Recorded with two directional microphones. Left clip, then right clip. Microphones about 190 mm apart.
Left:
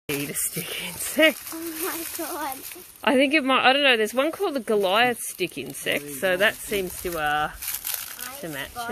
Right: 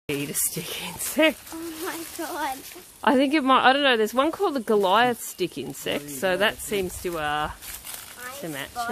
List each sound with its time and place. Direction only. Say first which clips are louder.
0.0 s speech: even; centre (ahead or behind)
1.9 s speech: right 1 dB; 20° left (ahead or behind)
3.0 s speech: left 1 dB; 10° right (ahead or behind)